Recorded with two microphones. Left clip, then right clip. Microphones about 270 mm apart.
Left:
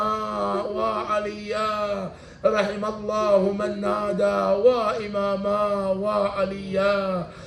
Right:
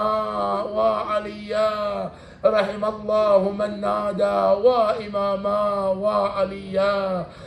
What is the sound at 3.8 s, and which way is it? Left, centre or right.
Speech, centre.